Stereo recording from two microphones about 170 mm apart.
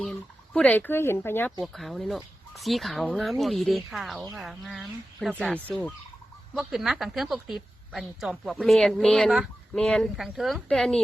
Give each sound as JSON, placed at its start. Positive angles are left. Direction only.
{"t": 0.0, "sound": "speech", "side_deg": 5}
{"t": 1.6, "sound": "a woman's voice", "side_deg": 0}
{"t": 5.5, "sound": "fowl", "side_deg": -10}
{"t": 6.5, "sound": "a woman's voice", "side_deg": 0}